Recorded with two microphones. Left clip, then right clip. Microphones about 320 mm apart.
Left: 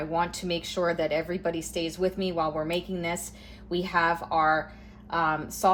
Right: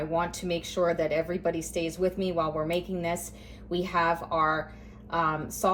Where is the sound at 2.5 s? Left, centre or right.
Centre.